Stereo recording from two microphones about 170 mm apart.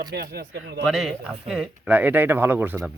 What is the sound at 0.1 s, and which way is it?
Speech, 65° right (ahead or behind).